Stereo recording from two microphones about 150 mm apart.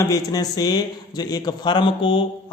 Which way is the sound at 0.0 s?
20° left (ahead or behind).